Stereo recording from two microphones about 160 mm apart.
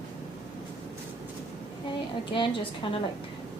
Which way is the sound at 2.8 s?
30° left (ahead or behind).